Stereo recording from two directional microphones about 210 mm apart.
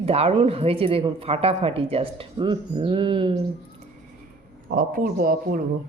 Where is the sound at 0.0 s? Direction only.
30° right (ahead or behind).